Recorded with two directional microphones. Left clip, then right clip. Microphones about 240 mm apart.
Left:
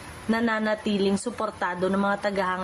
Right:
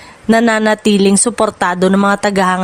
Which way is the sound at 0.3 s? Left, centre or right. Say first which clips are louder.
Right 14 dB; right.